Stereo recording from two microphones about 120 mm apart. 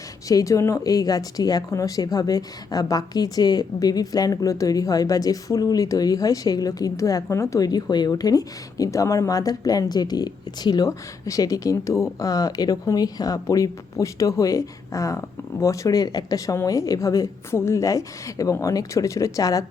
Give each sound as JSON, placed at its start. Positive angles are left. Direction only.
{"t": 0.3, "sound": "a woman's voice", "side_deg": 25}